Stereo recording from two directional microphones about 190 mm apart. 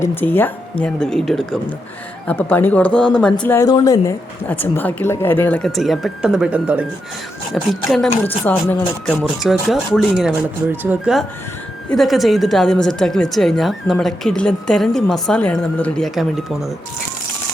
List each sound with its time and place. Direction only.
0.0 s speech: 10° left (ahead or behind)
8.5 s speech: 20° left (ahead or behind)
9.0 s speech: 5° left (ahead or behind)